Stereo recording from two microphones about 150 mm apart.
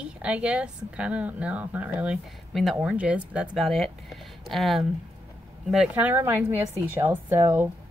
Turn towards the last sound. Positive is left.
turn(degrees=-15)  # may be behind; listen again after turning